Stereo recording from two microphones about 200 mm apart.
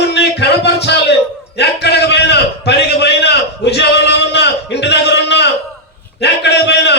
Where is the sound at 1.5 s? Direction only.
55° left (ahead or behind).